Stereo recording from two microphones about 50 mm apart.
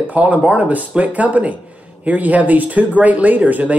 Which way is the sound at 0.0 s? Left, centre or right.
Right.